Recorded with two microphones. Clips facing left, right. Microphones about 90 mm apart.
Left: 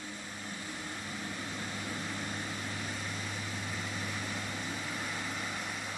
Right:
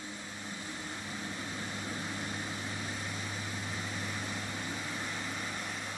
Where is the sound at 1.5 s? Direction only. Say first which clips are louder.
Even; 5° left (ahead or behind).